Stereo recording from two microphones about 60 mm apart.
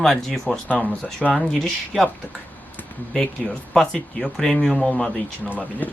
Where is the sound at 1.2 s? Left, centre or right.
Centre.